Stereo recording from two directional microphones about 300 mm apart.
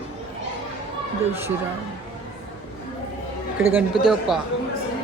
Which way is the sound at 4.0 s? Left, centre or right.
Centre.